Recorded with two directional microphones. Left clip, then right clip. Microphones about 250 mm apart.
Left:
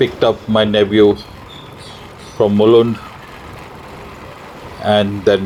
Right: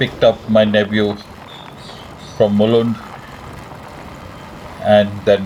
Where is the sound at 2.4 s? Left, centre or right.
Left.